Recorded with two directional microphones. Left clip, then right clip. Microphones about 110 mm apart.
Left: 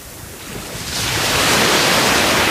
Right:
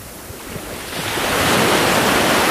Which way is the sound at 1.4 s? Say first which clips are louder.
Left 1 dB; 25° left (ahead or behind).